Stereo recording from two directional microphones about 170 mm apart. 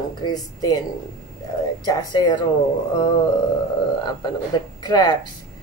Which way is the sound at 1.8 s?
25° left (ahead or behind).